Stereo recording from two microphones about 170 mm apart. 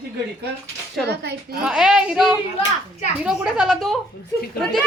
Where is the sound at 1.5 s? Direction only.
5° right (ahead or behind).